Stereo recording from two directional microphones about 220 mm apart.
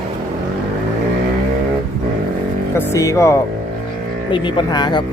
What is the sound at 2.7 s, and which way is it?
Speech, 10° left (ahead or behind).